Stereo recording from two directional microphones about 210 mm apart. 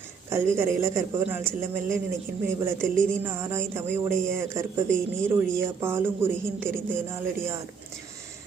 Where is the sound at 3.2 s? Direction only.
10° right (ahead or behind).